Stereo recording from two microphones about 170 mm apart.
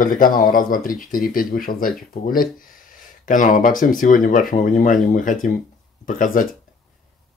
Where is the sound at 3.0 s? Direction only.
50° left (ahead or behind).